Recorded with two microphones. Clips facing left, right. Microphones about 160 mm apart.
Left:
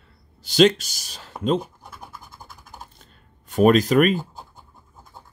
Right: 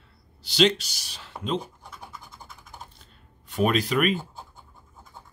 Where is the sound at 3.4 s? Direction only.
45° left (ahead or behind).